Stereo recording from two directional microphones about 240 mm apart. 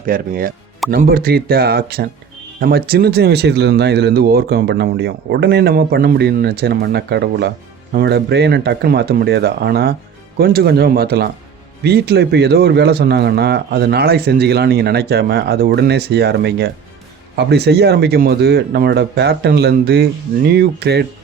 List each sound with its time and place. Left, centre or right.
0.0 s speech: right